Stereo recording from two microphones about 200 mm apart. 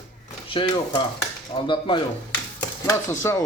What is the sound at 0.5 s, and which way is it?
Speech, 25° left (ahead or behind).